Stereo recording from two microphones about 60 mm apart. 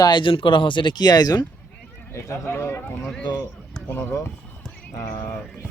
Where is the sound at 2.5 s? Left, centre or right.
Left.